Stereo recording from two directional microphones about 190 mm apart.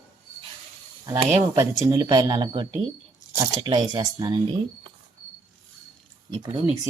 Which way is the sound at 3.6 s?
25° right (ahead or behind).